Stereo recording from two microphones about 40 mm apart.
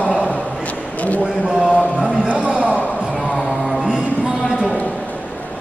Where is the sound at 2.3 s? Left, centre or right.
Right.